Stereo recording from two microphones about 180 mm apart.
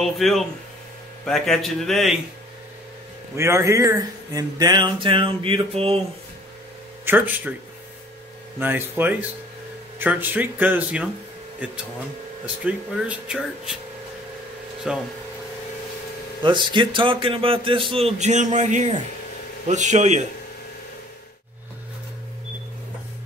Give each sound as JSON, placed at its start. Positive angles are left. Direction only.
{"t": 0.0, "sound": "speech", "side_deg": 0}
{"t": 3.3, "sound": "speech", "side_deg": -15}
{"t": 7.1, "sound": "speech", "side_deg": -10}
{"t": 8.5, "sound": "speech", "side_deg": -10}
{"t": 14.8, "sound": "speech", "side_deg": -5}
{"t": 16.4, "sound": "speech", "side_deg": -25}